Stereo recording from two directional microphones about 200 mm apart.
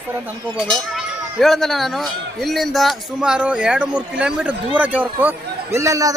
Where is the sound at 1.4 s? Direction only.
Centre (ahead or behind).